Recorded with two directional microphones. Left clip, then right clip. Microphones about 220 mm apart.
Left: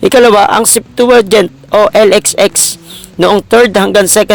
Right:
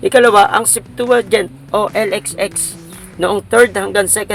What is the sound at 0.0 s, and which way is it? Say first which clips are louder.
Speech: left 4 dB; 40° left (ahead or behind).